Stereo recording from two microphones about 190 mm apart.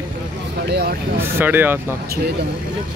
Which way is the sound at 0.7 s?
55° right (ahead or behind).